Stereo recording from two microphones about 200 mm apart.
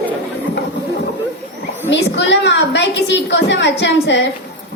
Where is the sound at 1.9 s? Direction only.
65° left (ahead or behind).